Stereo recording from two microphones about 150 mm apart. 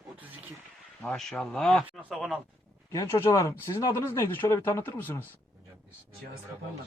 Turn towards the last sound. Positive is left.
turn(degrees=15)  # may be behind; listen again after turning